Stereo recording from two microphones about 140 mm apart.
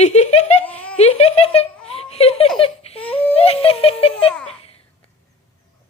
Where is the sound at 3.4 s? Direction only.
45° left (ahead or behind).